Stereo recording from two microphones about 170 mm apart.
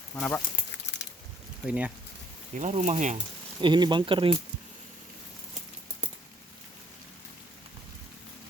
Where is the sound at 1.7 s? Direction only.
10° right (ahead or behind).